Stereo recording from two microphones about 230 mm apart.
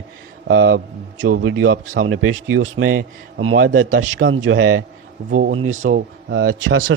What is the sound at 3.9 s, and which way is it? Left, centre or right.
Speech, right.